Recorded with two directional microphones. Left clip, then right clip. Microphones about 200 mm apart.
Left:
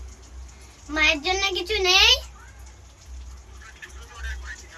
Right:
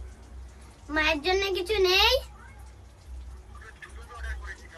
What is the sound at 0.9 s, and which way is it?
A child's voice, 25° right (ahead or behind).